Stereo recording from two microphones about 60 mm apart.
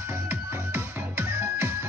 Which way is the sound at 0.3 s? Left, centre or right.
Right.